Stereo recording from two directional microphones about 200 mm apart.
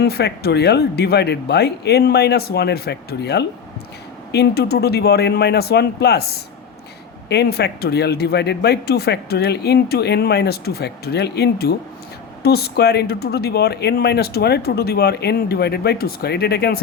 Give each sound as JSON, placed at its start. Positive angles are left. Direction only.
{"t": 0.0, "sound": "speech", "side_deg": 55}